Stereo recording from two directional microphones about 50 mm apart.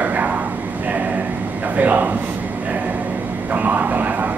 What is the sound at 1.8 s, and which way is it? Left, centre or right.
Speech, right.